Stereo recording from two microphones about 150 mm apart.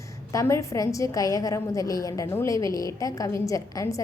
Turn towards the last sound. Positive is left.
turn(degrees=20)  # may be behind; listen again after turning